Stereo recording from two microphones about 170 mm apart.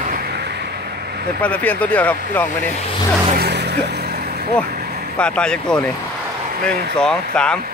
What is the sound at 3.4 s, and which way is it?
Vehicle, 75° right (ahead or behind).